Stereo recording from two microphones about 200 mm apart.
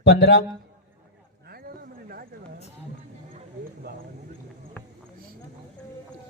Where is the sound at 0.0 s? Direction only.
55° left (ahead or behind).